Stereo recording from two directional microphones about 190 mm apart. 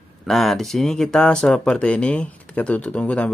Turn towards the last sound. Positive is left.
turn(degrees=5)  # may be behind; listen again after turning